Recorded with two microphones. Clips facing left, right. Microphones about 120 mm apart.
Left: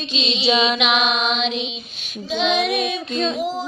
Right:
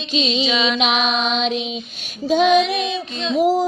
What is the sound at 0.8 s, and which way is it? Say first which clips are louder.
Music: right 1 dB; 35° right (ahead or behind).